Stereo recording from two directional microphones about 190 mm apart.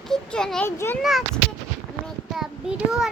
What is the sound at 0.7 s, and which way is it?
Child singing, 10° left (ahead or behind).